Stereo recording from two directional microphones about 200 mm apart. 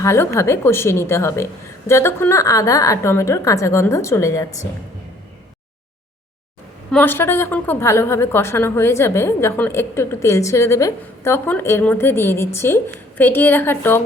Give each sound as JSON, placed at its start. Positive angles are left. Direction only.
{"t": 0.0, "sound": "a woman's voice", "side_deg": 15}
{"t": 6.9, "sound": "a woman's voice", "side_deg": 10}